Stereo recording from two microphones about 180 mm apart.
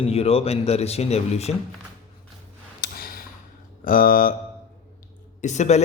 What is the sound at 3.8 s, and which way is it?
Speech, 50° left (ahead or behind).